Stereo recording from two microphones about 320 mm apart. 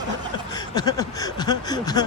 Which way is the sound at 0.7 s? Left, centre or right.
Centre.